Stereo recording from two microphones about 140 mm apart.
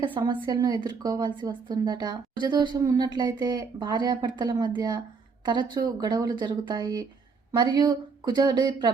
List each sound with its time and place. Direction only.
0.0 s a woman's voice: 35° right (ahead or behind)